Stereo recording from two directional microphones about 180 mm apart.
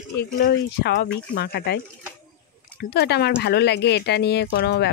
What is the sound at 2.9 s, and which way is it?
Speech, 65° left (ahead or behind).